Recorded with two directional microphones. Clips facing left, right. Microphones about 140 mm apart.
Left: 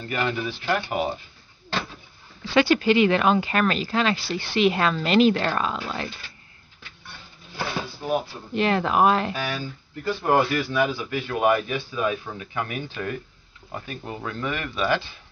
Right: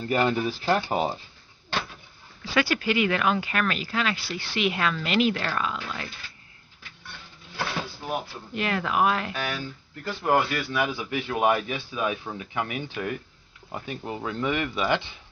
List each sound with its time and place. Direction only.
0.1 s speech: 35° right (ahead or behind)
2.5 s a woman's voice: 25° left (ahead or behind)
8.1 s a woman's voice: 30° left (ahead or behind)
9.3 s speech: centre (ahead or behind)
10.9 s a man's voice: 20° right (ahead or behind)